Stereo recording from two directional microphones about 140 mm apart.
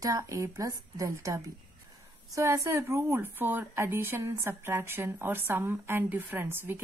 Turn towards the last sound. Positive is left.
turn(degrees=-15)  # may be behind; listen again after turning